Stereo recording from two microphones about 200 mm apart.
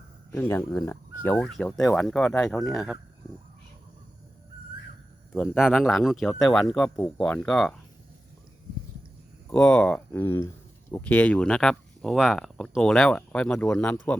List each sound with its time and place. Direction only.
0.3 s speech: 10° left (ahead or behind)
5.3 s speech: centre (ahead or behind)
9.5 s speech: 5° left (ahead or behind)